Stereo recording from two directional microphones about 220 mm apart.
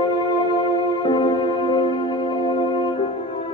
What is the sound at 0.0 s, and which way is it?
Music, 20° left (ahead or behind).